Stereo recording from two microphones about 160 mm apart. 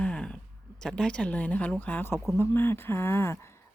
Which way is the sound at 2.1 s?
Centre (ahead or behind).